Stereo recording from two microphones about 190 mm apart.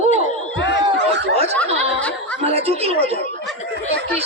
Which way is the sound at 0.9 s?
65° right (ahead or behind).